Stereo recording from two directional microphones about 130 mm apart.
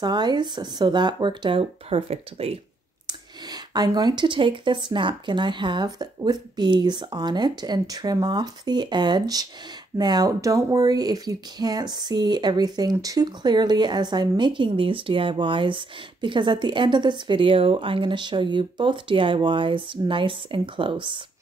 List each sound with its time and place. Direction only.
0.0 s speech: 35° right (ahead or behind); by 2.6 s 50° right (ahead or behind)
3.7 s speech: 30° right (ahead or behind)